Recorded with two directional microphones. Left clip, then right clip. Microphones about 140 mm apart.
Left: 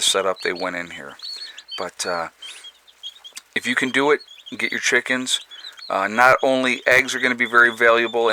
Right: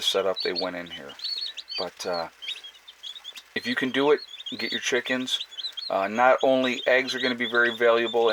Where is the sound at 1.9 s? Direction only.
25° left (ahead or behind).